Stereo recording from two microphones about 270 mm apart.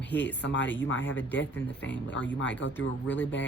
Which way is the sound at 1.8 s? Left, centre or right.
Left.